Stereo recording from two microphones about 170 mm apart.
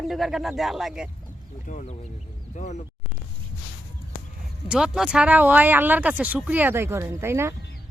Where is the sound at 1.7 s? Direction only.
50° left (ahead or behind).